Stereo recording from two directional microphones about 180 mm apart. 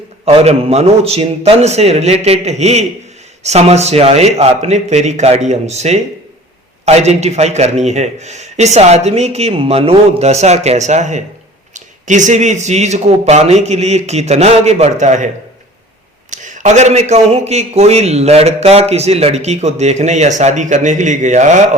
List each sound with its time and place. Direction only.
0.3 s a man's voice: 35° right (ahead or behind)
16.3 s a man's voice: 40° right (ahead or behind)